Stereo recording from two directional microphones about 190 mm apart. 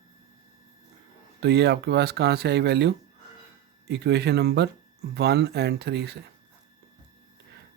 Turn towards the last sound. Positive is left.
turn(degrees=-60)  # may be behind; listen again after turning